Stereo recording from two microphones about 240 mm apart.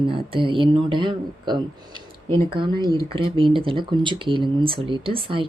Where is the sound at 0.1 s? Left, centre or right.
Right.